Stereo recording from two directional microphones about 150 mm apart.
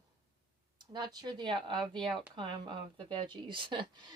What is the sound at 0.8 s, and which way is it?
A woman's voice, 30° right (ahead or behind).